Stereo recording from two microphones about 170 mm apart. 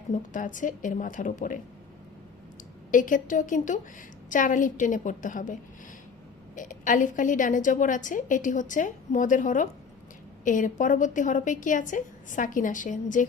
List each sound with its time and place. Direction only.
0.1 s a woman's voice: 50° left (ahead or behind)
2.9 s a woman's voice: 50° left (ahead or behind)
6.6 s a woman's voice: 50° left (ahead or behind)